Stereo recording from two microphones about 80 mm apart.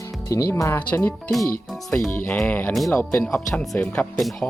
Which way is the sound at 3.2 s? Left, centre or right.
Centre.